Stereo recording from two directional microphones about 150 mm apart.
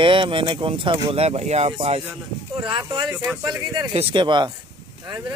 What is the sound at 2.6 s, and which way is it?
Speech, 30° right (ahead or behind).